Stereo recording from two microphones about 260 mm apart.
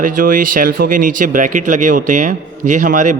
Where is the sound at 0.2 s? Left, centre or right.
Right.